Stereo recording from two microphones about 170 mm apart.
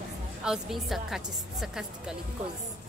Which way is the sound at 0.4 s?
5° right (ahead or behind).